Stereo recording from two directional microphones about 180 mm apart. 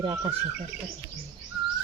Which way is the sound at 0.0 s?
25° right (ahead or behind).